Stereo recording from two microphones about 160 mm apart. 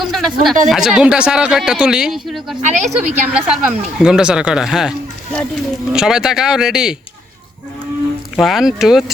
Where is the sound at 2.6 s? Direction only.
45° right (ahead or behind).